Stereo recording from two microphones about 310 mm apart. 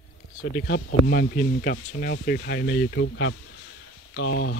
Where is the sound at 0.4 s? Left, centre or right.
Left.